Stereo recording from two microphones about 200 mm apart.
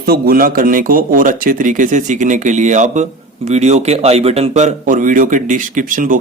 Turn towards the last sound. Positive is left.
turn(degrees=-40)  # may be behind; listen again after turning